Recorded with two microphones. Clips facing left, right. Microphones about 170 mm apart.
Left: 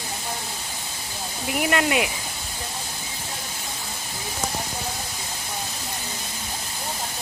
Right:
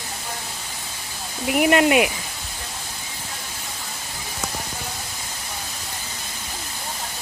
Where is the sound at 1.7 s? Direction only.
15° right (ahead or behind).